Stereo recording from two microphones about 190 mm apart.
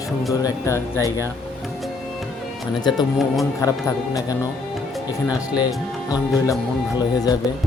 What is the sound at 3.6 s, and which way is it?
Speech, 20° left (ahead or behind).